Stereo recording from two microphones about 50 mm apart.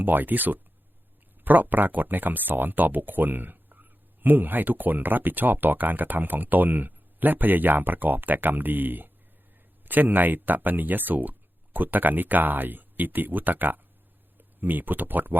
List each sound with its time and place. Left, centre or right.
0.0 s speech: right